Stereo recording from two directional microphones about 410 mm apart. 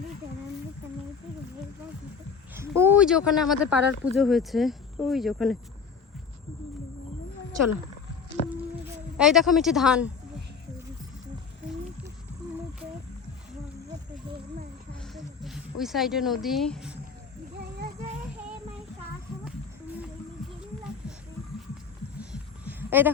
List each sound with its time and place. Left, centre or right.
2.6 s speech: centre
8.4 s music: centre
9.1 s speech: centre
15.0 s snake: centre
22.2 s a sound: centre